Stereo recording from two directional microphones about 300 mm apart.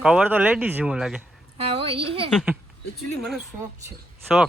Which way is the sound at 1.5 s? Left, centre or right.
Centre.